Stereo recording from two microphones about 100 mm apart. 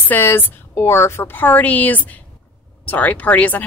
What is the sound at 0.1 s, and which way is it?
A woman's voice, 20° left (ahead or behind).